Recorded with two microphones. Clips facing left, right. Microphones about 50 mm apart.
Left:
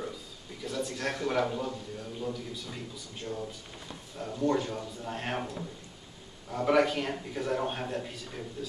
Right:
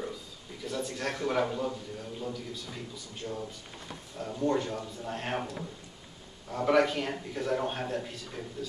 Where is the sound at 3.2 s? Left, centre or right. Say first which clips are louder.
Even; centre.